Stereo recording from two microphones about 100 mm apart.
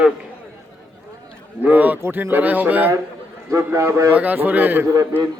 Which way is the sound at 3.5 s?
30° right (ahead or behind).